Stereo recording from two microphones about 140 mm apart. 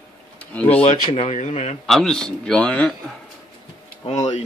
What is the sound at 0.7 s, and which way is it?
Speech, 45° left (ahead or behind).